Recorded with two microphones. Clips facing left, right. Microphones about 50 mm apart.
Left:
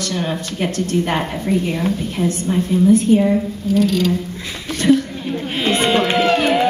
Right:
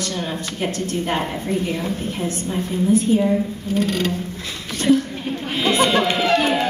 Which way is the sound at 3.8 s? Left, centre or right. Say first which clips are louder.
Left 4 dB; right.